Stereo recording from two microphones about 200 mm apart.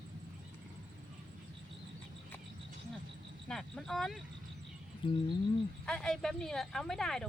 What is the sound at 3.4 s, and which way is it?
Speech, centre (ahead or behind).